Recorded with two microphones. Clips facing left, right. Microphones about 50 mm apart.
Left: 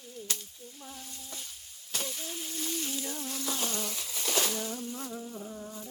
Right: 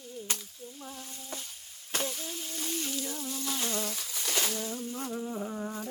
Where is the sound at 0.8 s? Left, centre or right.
Centre.